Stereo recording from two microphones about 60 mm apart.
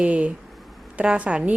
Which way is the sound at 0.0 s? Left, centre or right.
Centre.